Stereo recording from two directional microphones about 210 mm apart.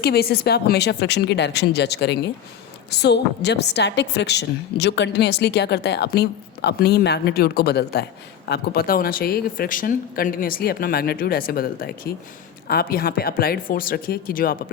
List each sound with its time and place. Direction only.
0.0 s a woman's voice: 50° left (ahead or behind)